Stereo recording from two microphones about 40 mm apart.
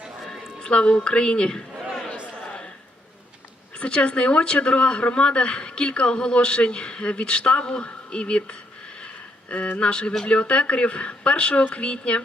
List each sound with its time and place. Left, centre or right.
0.6 s a woman's voice: left
3.8 s speech: left